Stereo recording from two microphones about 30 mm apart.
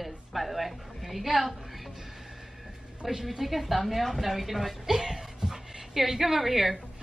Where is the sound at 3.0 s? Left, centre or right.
Centre.